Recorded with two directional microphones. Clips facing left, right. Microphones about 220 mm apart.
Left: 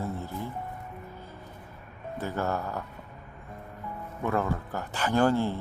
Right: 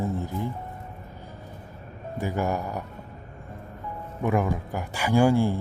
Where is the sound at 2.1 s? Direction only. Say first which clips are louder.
Right 3 dB; 15° right (ahead or behind).